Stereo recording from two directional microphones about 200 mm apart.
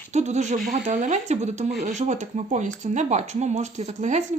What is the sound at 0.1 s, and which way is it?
Speech, 35° right (ahead or behind).